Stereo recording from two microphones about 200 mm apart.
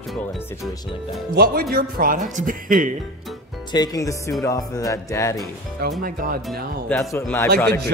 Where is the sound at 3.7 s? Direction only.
20° left (ahead or behind).